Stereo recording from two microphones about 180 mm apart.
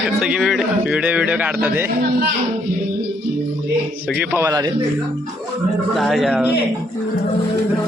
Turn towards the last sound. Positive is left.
turn(degrees=0)  # may be behind; listen again after turning